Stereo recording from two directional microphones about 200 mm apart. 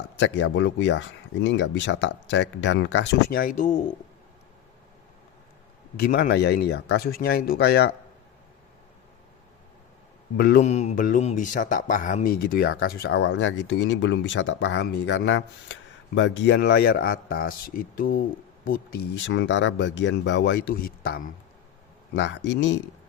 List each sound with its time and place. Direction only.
0.2 s speech: 65° left (ahead or behind); by 3.8 s 40° left (ahead or behind)
6.0 s speech: 50° left (ahead or behind)
10.3 s speech: 45° left (ahead or behind)
22.1 s speech: 60° left (ahead or behind)